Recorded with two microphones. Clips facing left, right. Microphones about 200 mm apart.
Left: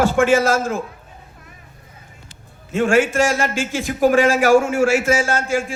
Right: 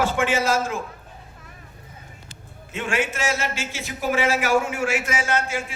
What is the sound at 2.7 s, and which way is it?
A man's voice, 45° left (ahead or behind).